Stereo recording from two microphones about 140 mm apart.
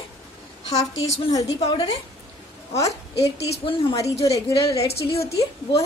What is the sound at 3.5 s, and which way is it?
Speech, 40° left (ahead or behind).